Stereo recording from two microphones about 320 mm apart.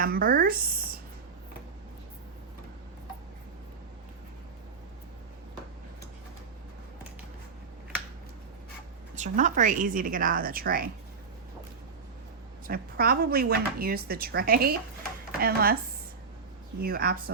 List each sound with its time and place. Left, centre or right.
0.0 s speech: right
9.1 s speech: right
12.6 s speech: right
16.8 s speech: right